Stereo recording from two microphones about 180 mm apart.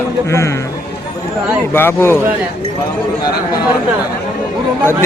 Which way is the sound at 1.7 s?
15° left (ahead or behind).